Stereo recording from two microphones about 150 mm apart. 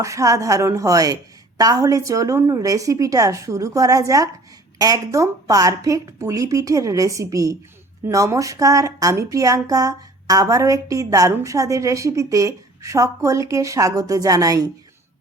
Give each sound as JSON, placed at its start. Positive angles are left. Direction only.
{"t": 0.0, "sound": "speech", "side_deg": -20}